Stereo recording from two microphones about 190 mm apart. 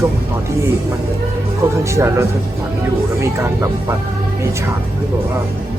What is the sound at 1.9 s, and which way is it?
Speech, 15° right (ahead or behind).